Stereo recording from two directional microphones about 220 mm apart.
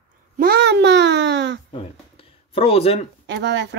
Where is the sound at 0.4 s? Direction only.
45° right (ahead or behind).